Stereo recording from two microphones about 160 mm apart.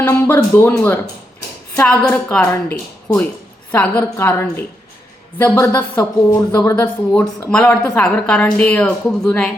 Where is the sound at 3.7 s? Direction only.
10° left (ahead or behind).